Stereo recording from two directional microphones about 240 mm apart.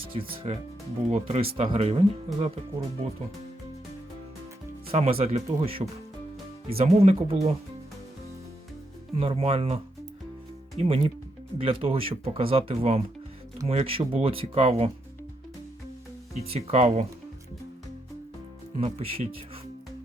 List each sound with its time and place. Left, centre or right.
0.1 s speech: right
4.9 s speech: right
9.1 s speech: right
16.4 s speech: right
18.8 s speech: right